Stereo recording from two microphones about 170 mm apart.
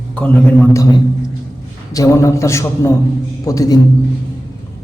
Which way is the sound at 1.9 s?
20° left (ahead or behind).